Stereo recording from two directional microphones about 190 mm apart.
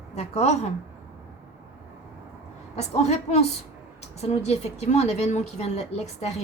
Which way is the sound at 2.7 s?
35° left (ahead or behind).